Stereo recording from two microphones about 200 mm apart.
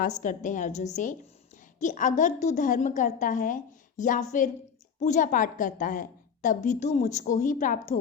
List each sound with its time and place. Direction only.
0.2 s a woman's voice: 40° left (ahead or behind)